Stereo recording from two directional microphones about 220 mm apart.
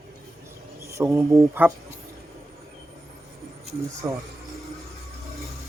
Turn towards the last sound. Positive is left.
turn(degrees=-10)  # may be behind; listen again after turning